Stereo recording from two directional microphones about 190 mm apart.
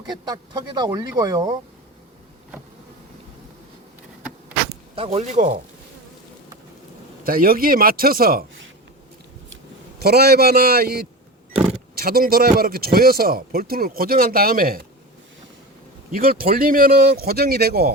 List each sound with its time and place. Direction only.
0.1 s speech: 20° right (ahead or behind)
4.9 s speech: 30° right (ahead or behind)
7.3 s a man's voice: 50° right (ahead or behind)
10.0 s a man's voice: 55° right (ahead or behind)
16.1 s a man's voice: 50° right (ahead or behind)